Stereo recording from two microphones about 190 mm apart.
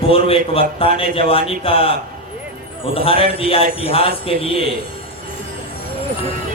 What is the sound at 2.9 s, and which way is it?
A man's voice, 30° left (ahead or behind).